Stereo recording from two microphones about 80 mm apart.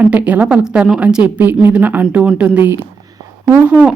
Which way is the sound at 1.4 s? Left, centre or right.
Right.